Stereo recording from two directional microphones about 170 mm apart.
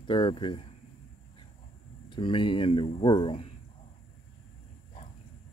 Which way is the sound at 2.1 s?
30° left (ahead or behind).